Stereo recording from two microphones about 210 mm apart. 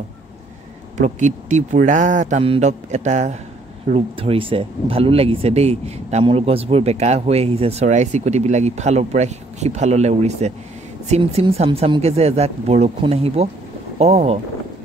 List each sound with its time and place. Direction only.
0.9 s speech: 35° right (ahead or behind)